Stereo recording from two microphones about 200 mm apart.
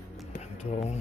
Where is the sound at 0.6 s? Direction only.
35° left (ahead or behind).